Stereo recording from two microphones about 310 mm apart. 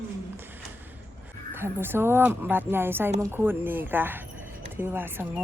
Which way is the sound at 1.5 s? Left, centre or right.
Centre.